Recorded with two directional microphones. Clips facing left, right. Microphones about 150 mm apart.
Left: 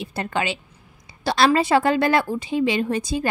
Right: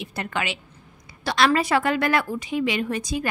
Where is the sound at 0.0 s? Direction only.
30° left (ahead or behind).